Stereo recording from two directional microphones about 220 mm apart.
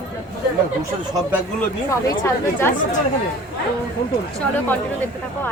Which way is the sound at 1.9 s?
15° left (ahead or behind).